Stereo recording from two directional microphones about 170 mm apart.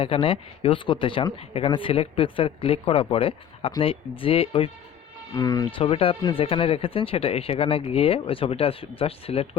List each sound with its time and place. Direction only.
0.0 s speech: 30° left (ahead or behind)